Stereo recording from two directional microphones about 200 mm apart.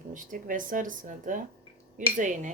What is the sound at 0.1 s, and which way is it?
Speech, 40° right (ahead or behind).